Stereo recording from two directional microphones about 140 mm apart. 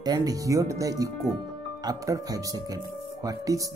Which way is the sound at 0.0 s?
25° right (ahead or behind).